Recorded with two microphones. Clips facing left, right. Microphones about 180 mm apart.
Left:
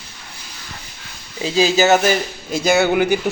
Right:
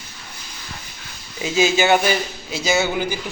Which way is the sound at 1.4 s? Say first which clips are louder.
Left 2 dB; 35° left (ahead or behind).